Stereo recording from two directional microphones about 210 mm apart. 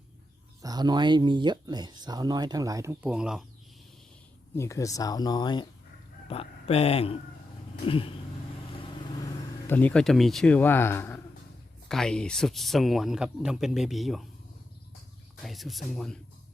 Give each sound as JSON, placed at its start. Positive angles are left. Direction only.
{"t": 0.6, "sound": "speech", "side_deg": -20}
{"t": 4.5, "sound": "speech", "side_deg": 15}
{"t": 7.9, "sound": "a sound", "side_deg": 25}
{"t": 9.2, "sound": "speech", "side_deg": 10}
{"t": 15.4, "sound": "speech", "side_deg": 0}